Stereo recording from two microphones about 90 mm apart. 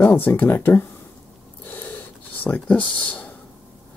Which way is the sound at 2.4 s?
15° left (ahead or behind).